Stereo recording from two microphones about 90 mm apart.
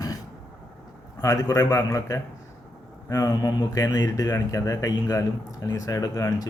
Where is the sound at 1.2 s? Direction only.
35° left (ahead or behind).